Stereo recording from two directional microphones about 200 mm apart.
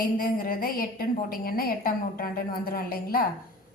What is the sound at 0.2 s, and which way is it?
A woman's voice, 45° left (ahead or behind).